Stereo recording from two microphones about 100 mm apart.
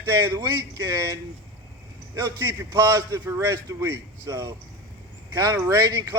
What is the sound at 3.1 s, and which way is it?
Speech, 30° right (ahead or behind).